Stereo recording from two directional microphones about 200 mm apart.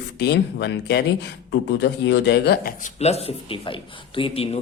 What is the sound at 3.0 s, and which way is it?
Speech, 30° left (ahead or behind).